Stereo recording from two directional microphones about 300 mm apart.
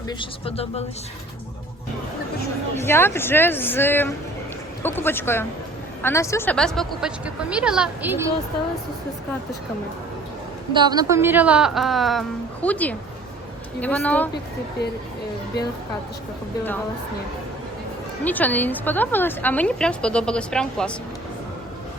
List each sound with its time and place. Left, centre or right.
0.1 s speech: centre
2.8 s a woman's voice: centre
10.8 s a woman's voice: centre
14.8 s speech: left
18.3 s a woman's voice: centre